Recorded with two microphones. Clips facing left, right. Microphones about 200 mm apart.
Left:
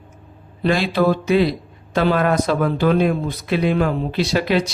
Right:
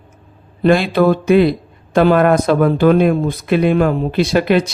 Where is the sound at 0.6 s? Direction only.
55° right (ahead or behind).